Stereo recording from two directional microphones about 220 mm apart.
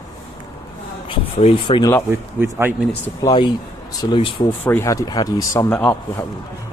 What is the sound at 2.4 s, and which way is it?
Speech, 10° right (ahead or behind).